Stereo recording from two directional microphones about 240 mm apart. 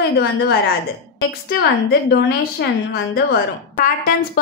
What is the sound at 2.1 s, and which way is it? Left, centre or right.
Speech, left.